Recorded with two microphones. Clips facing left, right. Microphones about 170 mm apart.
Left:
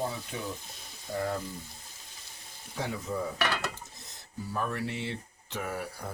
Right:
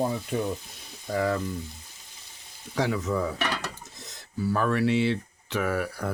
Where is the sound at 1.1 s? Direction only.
90° right.